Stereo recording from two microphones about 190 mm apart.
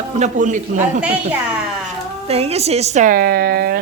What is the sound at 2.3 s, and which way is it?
A woman's voice, 35° right (ahead or behind).